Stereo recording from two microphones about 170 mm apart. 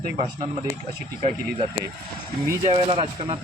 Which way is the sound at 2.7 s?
35° right (ahead or behind).